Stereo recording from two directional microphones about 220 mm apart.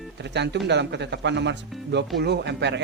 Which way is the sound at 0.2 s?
50° right (ahead or behind).